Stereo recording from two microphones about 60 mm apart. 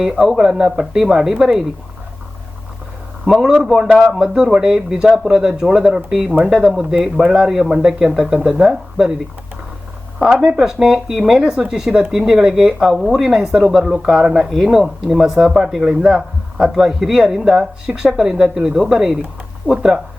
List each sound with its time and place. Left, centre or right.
0.0 s speech: centre
3.6 s a man's voice: centre
10.3 s speech: centre
12.8 s speech: centre